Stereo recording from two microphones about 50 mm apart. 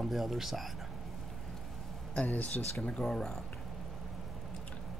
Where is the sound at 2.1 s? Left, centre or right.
Left.